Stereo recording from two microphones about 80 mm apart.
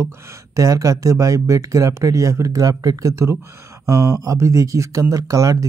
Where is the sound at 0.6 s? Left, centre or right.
Right.